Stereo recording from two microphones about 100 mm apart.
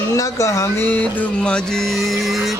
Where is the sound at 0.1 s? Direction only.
30° left (ahead or behind).